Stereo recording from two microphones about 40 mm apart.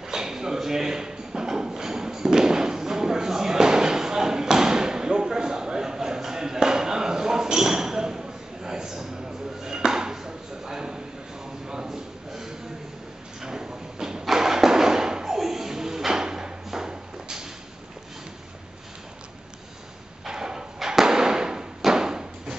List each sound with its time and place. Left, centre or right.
0.0 s rub: centre
11.6 s a sound: centre
20.2 s thump: centre